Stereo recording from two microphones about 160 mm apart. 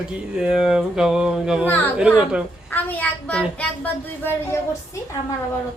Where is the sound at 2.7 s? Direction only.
10° left (ahead or behind).